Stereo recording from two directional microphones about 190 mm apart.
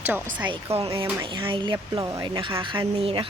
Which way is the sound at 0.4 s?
25° right (ahead or behind).